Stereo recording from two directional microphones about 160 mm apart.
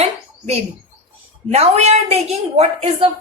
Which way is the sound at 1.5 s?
40° right (ahead or behind).